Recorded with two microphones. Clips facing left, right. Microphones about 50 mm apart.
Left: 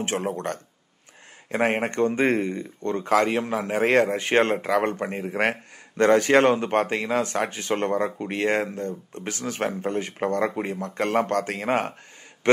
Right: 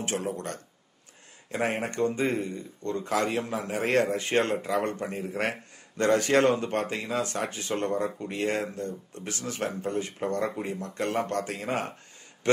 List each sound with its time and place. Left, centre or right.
0.0 s speech: left